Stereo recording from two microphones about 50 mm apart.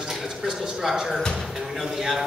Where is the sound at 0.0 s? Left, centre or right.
Centre.